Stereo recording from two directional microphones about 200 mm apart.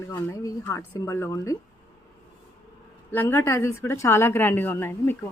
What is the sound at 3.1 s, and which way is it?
A woman's voice, 10° left (ahead or behind).